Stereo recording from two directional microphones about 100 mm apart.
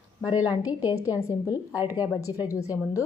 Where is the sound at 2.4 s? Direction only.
35° left (ahead or behind).